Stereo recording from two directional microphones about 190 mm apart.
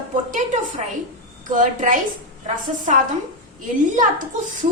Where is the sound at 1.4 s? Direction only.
45° right (ahead or behind).